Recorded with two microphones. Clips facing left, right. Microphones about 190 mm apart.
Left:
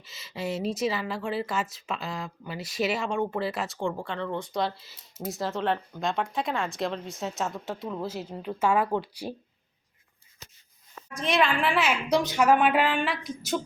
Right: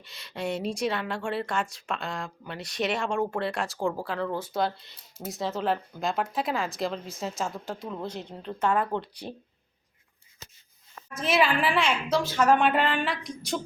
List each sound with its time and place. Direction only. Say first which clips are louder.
0.0 s a woman's voice: right 1 dB; centre (ahead or behind)
11.1 s a woman's voice: right 1 dB; 5° right (ahead or behind)
12.0 s a woman's voice: left 1 dB; 15° left (ahead or behind)
12.5 s a woman's voice: even; 5° left (ahead or behind)